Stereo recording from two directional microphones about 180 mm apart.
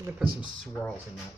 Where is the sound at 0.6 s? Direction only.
10° left (ahead or behind).